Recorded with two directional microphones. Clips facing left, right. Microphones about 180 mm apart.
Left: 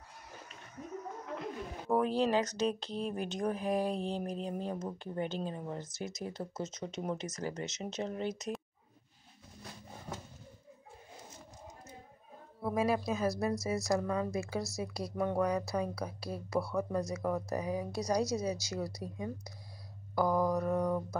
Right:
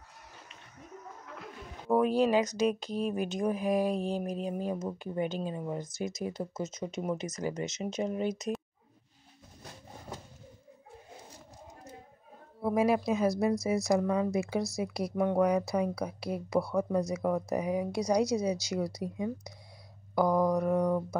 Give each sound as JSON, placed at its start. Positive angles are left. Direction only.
{"t": 2.0, "sound": "speech", "side_deg": -15}
{"t": 12.6, "sound": "speech", "side_deg": -20}
{"t": 20.2, "sound": "mantra", "side_deg": 5}
{"t": 20.5, "sound": "speech", "side_deg": -10}